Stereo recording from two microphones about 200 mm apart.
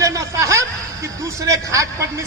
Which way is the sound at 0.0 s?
15° right (ahead or behind).